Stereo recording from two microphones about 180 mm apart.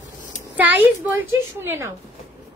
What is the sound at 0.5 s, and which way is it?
A woman's voice, 10° right (ahead or behind).